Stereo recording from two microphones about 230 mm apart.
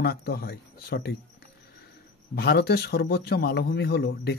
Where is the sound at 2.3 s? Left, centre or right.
Left.